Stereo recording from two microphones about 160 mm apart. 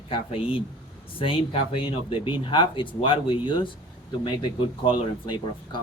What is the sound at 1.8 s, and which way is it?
Speech, 30° left (ahead or behind).